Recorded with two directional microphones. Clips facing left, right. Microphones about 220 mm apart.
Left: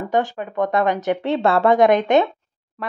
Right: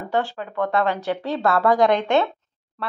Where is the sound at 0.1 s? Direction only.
15° left (ahead or behind).